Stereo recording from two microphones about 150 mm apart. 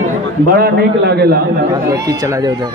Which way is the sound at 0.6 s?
90° right.